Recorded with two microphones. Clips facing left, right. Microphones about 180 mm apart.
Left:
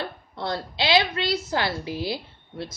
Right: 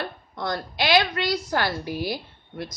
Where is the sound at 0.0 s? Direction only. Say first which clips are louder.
Even; 30° left (ahead or behind).